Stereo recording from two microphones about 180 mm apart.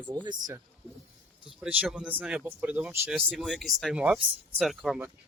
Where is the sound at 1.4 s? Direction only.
5° right (ahead or behind).